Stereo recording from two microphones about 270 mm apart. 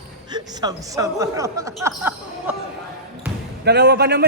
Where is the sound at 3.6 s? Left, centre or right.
Right.